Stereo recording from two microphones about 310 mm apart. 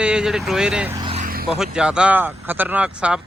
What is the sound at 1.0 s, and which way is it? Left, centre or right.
Vehicle, right.